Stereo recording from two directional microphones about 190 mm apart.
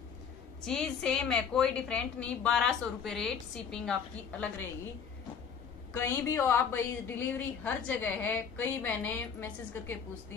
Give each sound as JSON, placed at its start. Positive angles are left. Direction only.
{"t": 0.7, "sound": "a woman's voice", "side_deg": 0}
{"t": 5.9, "sound": "a woman's voice", "side_deg": 15}